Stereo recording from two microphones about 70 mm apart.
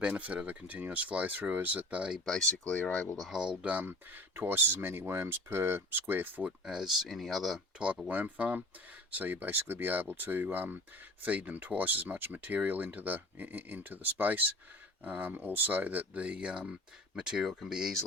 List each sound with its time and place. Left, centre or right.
0.0 s speech: right
2.2 s speech: centre
2.7 s speech: centre
3.3 s speech: centre
3.8 s speech: right
6.7 s speech: centre
7.8 s speech: centre